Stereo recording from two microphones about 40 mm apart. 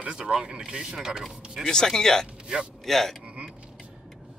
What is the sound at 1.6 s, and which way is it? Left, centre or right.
Speech, centre.